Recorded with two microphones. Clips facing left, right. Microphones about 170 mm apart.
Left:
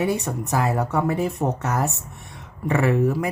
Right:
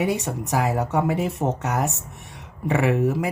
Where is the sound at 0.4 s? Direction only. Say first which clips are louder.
Even; 15° right (ahead or behind).